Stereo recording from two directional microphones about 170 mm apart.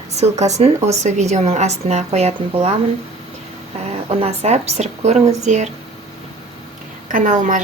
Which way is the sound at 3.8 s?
40° right (ahead or behind).